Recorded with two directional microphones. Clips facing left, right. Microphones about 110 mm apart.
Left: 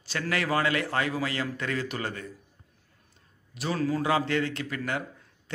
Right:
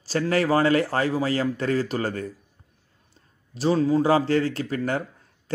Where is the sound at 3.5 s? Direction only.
30° right (ahead or behind).